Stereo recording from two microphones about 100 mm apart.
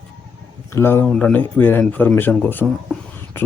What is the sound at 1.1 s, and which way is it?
Speech, 15° left (ahead or behind).